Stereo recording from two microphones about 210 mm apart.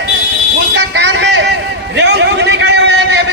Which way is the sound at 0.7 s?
55° right (ahead or behind).